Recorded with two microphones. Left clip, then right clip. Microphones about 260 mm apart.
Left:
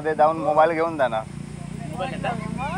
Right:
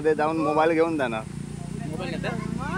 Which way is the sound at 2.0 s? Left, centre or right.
Centre.